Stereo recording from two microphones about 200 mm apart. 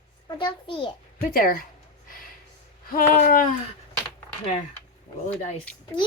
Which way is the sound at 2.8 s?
45° left (ahead or behind).